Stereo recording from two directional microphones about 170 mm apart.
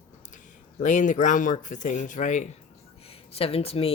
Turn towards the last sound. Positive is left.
turn(degrees=35)  # may be behind; listen again after turning